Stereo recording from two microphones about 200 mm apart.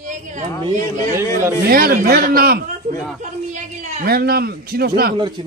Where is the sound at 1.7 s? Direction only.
50° right (ahead or behind).